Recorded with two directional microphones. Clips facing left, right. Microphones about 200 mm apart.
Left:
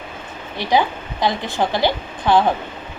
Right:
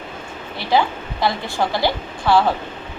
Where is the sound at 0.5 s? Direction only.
15° left (ahead or behind).